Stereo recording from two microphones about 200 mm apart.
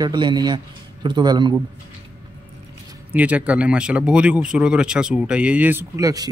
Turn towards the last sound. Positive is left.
turn(degrees=-15)  # may be behind; listen again after turning